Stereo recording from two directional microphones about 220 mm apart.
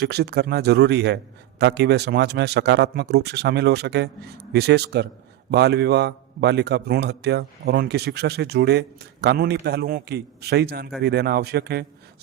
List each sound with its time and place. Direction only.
0.0 s a man's voice: 50° right (ahead or behind)